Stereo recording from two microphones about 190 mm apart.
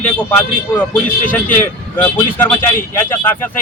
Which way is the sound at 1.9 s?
10° left (ahead or behind).